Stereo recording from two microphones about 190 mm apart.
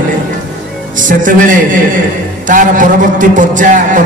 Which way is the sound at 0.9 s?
45° right (ahead or behind).